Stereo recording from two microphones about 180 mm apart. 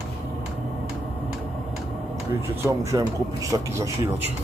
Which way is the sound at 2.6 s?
15° right (ahead or behind).